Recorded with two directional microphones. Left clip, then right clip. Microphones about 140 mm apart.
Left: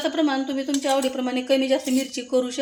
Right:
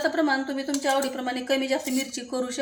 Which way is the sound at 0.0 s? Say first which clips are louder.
Left 1 dB; 30° left (ahead or behind).